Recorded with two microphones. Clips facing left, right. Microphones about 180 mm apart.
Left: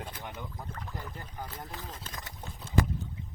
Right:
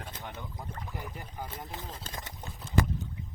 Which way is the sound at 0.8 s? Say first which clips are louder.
Right 1 dB; 10° right (ahead or behind).